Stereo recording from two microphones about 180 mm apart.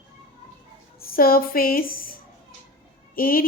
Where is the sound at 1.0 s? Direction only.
55° left (ahead or behind).